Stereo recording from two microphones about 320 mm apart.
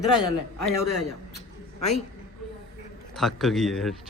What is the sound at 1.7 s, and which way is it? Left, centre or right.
Speech, left.